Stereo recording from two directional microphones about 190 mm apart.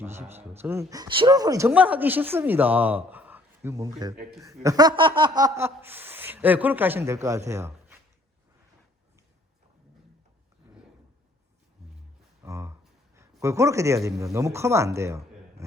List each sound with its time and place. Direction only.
0.0 s speech: 10° right (ahead or behind)
3.9 s speech: 30° right (ahead or behind)
4.4 s speech: 20° right (ahead or behind)
12.4 s speech: 15° right (ahead or behind)